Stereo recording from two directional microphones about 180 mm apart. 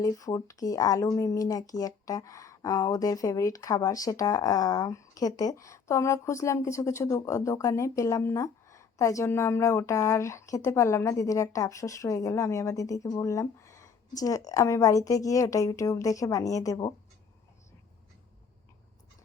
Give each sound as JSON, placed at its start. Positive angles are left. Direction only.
{"t": 0.0, "sound": "a woman's voice", "side_deg": 20}